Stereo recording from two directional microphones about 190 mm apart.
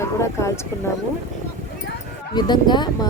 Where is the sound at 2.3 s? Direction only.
25° left (ahead or behind).